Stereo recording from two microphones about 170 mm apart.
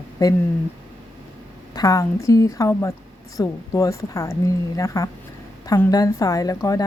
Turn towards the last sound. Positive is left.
turn(degrees=20)  # may be behind; listen again after turning